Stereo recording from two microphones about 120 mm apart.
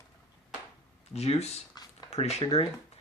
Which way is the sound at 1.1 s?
60° left (ahead or behind).